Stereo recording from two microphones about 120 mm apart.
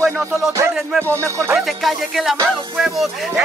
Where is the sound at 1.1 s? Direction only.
25° right (ahead or behind).